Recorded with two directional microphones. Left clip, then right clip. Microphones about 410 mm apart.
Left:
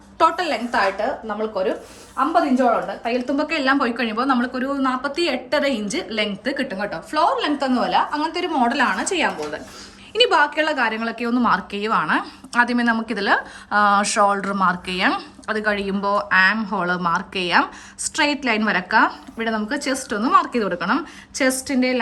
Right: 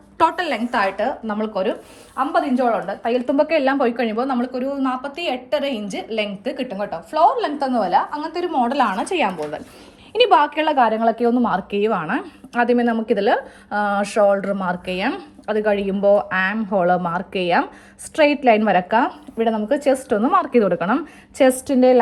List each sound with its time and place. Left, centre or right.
0.2 s speech: centre
3.0 s a woman's voice: centre
11.2 s a woman's voice: centre